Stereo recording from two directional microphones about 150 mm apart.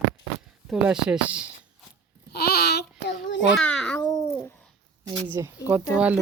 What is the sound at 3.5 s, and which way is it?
Babbling, 5° left (ahead or behind).